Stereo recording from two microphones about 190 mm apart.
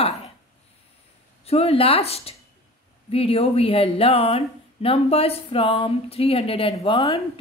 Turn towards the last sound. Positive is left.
turn(degrees=30)  # may be behind; listen again after turning